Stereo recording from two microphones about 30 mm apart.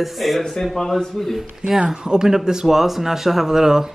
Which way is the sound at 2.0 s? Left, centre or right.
Right.